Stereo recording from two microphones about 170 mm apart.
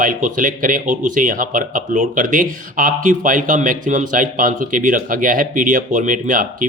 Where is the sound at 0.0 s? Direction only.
50° right (ahead or behind).